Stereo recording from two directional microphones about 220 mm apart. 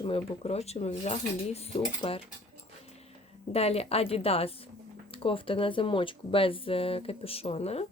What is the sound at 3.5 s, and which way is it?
Speech, 25° left (ahead or behind).